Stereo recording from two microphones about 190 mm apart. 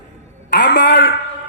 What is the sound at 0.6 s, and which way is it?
Speech, 65° left (ahead or behind).